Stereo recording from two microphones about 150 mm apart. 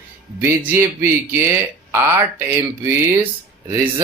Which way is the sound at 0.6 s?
15° right (ahead or behind).